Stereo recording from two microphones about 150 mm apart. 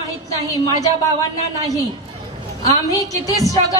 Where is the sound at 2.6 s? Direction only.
20° left (ahead or behind).